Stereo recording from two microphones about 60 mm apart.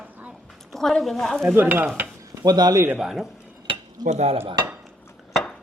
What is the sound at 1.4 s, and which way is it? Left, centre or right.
Stir, right.